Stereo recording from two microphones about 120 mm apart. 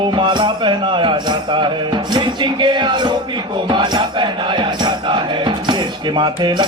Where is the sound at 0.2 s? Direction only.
40° right (ahead or behind).